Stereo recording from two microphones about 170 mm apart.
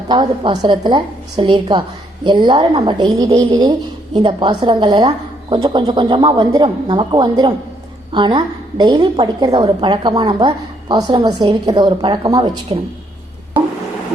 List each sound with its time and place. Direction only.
0.1 s a woman's voice: 25° right (ahead or behind)